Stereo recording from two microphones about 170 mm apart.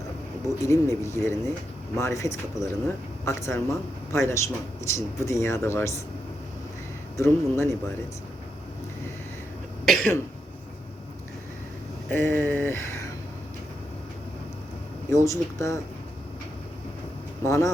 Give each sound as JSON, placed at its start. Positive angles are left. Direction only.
{"t": 0.4, "sound": "speech", "side_deg": 20}
{"t": 7.2, "sound": "speech", "side_deg": 15}
{"t": 9.8, "sound": "cough", "side_deg": 5}
{"t": 12.1, "sound": "speech", "side_deg": 10}
{"t": 15.1, "sound": "speech", "side_deg": 20}
{"t": 17.4, "sound": "speech", "side_deg": 20}